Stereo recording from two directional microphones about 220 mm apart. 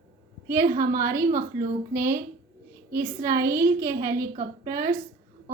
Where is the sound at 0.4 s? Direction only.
15° right (ahead or behind).